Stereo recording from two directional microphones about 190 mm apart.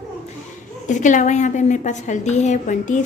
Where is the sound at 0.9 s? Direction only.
40° left (ahead or behind).